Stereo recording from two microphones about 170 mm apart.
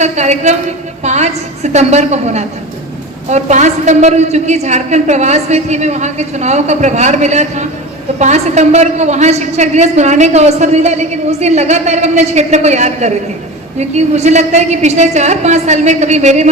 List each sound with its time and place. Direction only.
0.0 s a woman's voice: 40° right (ahead or behind)